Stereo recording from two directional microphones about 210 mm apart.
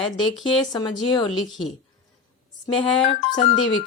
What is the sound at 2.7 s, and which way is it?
Speech, 25° left (ahead or behind).